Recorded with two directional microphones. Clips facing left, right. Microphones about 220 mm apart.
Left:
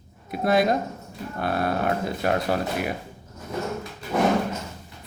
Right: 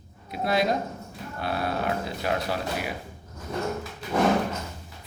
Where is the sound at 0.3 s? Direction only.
50° left (ahead or behind).